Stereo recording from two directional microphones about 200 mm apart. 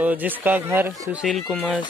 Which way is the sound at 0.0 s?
10° right (ahead or behind).